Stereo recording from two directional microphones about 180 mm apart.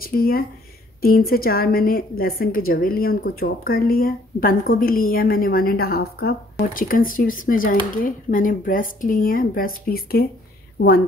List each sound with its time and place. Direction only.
0.0 s a woman's voice: 55° left (ahead or behind)